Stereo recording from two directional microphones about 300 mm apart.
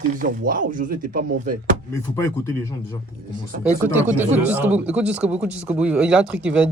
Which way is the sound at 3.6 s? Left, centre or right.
Centre.